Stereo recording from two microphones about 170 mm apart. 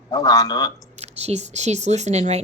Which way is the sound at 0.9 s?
40° right (ahead or behind).